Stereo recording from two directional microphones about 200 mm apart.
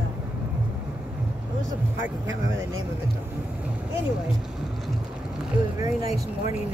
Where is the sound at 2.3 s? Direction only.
75° right (ahead or behind).